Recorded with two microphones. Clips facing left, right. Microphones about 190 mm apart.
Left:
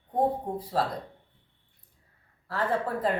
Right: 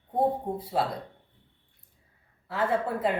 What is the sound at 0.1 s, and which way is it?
Speech, 10° right (ahead or behind).